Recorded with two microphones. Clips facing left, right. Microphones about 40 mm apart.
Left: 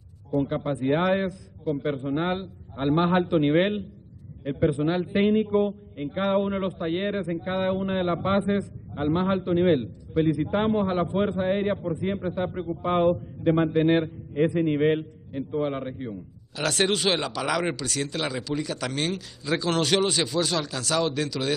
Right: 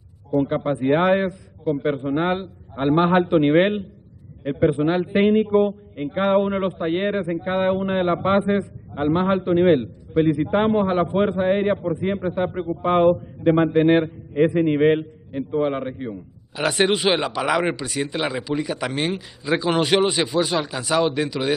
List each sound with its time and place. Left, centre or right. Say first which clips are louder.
0.7 s a man's voice: right 5 dB; centre
1.6 s a man's voice: right 5 dB; centre
2.0 s a man's voice: right 5 dB; centre
3.5 s a man's voice: right 5 dB; centre
5.1 s a man's voice: right 4 dB; centre
5.5 s a man's voice: right 5 dB; right
8.5 s a man's voice: right 4 dB; centre
11.4 s a man's voice: right 5 dB; centre
11.7 s a man's voice: right 5 dB; centre
13.4 s a man's voice: right 4 dB; centre
14.0 s a man's voice: right 5 dB; centre